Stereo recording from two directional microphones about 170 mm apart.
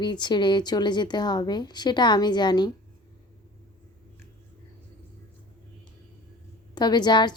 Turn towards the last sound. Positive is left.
turn(degrees=25)  # may be behind; listen again after turning